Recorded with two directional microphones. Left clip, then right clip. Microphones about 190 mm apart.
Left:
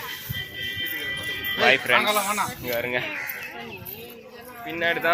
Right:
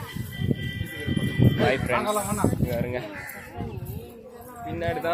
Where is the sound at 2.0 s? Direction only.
25° right (ahead or behind).